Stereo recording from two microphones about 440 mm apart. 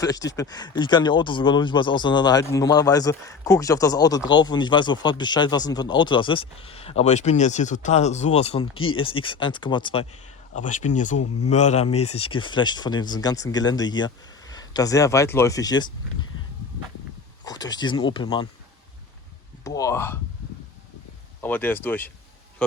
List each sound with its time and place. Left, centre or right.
0.0 s speech: centre
8.7 s speech: left
9.0 s speech: centre
17.4 s speech: centre
19.6 s speech: centre
21.4 s speech: centre